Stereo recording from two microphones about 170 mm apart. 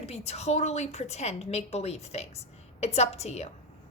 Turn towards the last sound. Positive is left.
turn(degrees=40)  # may be behind; listen again after turning